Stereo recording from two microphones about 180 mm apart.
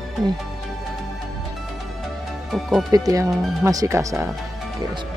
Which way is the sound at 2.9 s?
20° right (ahead or behind).